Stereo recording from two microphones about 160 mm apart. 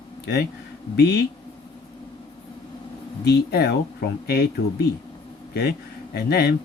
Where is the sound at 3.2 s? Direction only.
85° left.